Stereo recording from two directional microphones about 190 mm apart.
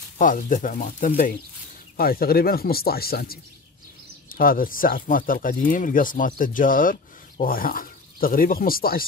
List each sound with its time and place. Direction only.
0.2 s speech: 45° left (ahead or behind)